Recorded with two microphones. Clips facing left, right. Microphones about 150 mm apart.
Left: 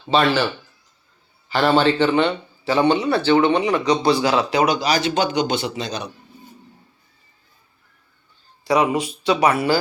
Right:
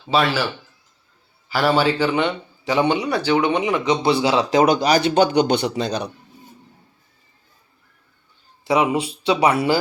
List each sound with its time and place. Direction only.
0.0 s speech: 5° right (ahead or behind)
1.5 s a man's voice: 5° right (ahead or behind); by 4.4 s 25° right (ahead or behind)
4.5 s speech: 50° right (ahead or behind)
8.6 s speech: 25° right (ahead or behind)